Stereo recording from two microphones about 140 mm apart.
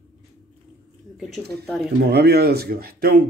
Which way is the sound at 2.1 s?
90° right.